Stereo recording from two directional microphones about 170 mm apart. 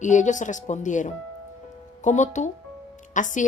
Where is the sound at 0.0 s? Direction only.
45° left (ahead or behind).